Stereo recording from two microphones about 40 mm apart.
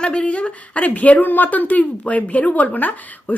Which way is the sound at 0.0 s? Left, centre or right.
Left.